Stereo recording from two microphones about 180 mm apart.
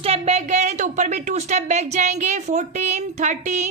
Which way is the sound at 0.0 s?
35° right (ahead or behind).